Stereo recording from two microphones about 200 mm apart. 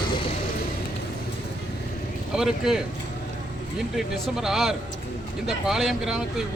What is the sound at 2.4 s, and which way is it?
Speech, centre (ahead or behind).